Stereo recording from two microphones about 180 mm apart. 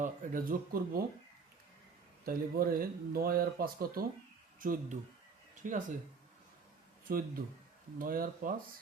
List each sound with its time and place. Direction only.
0.0 s speech: 50° right (ahead or behind)
2.2 s speech: 55° right (ahead or behind)
7.1 s speech: 55° right (ahead or behind)